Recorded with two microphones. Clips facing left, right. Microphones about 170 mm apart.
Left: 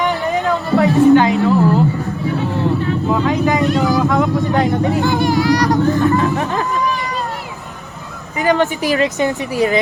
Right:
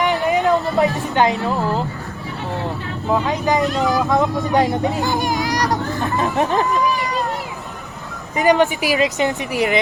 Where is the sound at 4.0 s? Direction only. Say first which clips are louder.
Left 3 dB; 20° right (ahead or behind).